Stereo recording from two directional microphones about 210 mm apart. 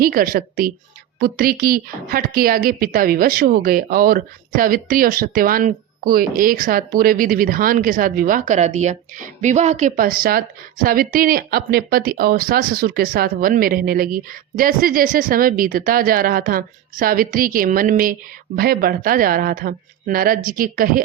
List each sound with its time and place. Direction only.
0.0 s speech: 45° right (ahead or behind)